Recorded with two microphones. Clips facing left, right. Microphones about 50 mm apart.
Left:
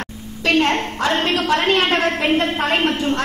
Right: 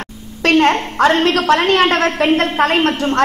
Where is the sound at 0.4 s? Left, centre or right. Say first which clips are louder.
Right 4 dB; right.